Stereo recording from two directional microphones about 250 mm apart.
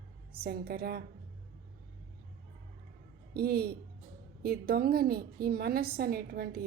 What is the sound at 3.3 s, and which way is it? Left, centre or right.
A woman's voice, right.